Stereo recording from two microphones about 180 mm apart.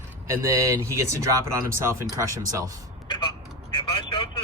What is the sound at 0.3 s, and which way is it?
Speech, 15° right (ahead or behind).